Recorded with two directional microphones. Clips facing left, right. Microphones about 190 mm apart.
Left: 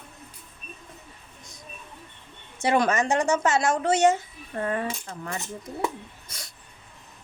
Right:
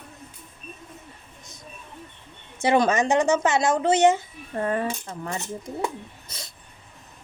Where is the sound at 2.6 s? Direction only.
20° right (ahead or behind).